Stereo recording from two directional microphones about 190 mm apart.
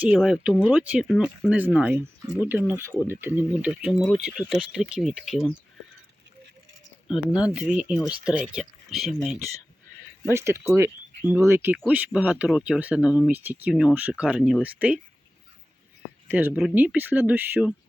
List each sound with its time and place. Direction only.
0.0 s speech: 5° right (ahead or behind)
7.1 s speech: 20° left (ahead or behind)
7.8 s speech: 5° right (ahead or behind)
10.3 s speech: 15° right (ahead or behind)
16.3 s speech: 10° right (ahead or behind)